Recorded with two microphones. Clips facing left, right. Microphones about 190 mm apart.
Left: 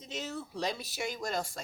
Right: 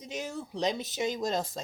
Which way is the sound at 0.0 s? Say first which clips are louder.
Right 2 dB; 15° right (ahead or behind).